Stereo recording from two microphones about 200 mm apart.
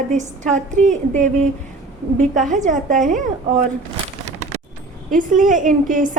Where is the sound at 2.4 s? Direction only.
40° right (ahead or behind).